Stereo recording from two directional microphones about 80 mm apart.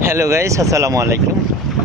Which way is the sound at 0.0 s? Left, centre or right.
Right.